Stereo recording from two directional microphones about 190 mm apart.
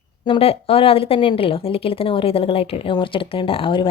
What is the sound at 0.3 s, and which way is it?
Speech, 30° left (ahead or behind).